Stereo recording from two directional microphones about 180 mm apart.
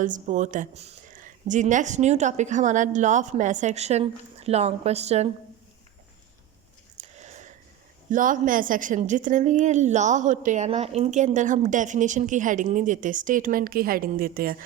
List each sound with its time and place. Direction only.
0.0 s speech: 45° right (ahead or behind)
6.9 s a sound: 40° right (ahead or behind)
8.1 s a woman's voice: 50° right (ahead or behind)